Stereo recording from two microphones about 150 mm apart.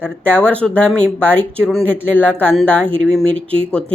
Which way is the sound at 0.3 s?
10° left (ahead or behind).